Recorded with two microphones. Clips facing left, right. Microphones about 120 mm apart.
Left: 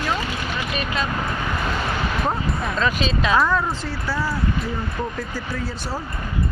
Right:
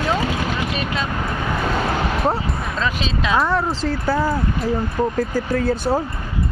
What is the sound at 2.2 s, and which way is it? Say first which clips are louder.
Music: right 3 dB; 30° right (ahead or behind).